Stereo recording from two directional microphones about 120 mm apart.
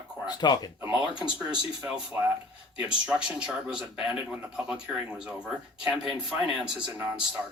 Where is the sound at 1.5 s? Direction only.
5° right (ahead or behind).